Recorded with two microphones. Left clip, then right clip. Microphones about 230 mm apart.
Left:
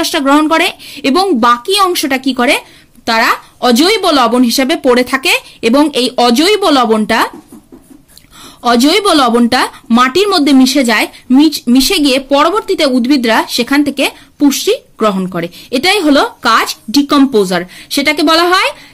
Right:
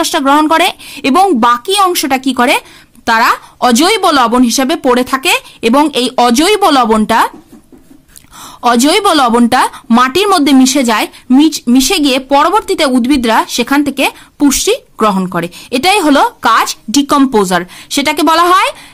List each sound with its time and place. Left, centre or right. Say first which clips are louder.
0.0 s speech: right 1 dB; right
8.5 s speech: even; right